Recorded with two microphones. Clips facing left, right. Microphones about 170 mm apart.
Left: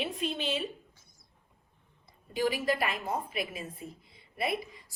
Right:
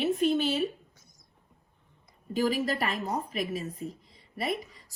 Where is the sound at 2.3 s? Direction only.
40° right (ahead or behind).